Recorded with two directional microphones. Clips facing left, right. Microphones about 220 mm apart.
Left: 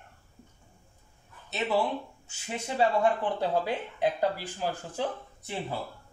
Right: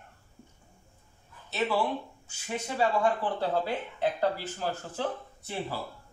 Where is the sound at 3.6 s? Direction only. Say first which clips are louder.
Left 1 dB; 15° left (ahead or behind).